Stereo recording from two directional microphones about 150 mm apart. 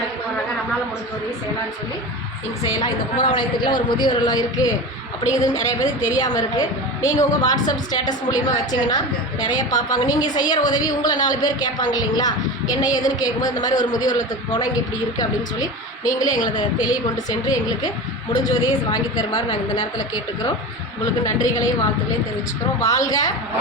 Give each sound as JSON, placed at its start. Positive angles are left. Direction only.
{"t": 2.7, "sound": "a woman's voice", "side_deg": 30}
{"t": 23.0, "sound": "a woman's voice", "side_deg": 25}